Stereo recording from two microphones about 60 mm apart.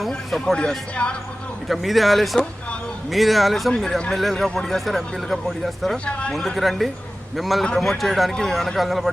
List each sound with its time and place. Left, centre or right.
0.3 s speech: centre
1.6 s speech: centre
6.1 s speech: centre
6.3 s speech: centre
7.6 s speech: centre
7.9 s speech: centre